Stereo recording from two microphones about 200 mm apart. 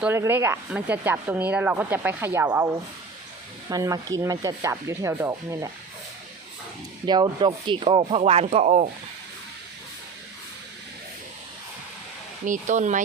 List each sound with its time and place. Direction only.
0.0 s speech: 10° right (ahead or behind)
3.7 s speech: 20° right (ahead or behind)
7.0 s speech: 20° right (ahead or behind)
12.5 s speech: 40° right (ahead or behind)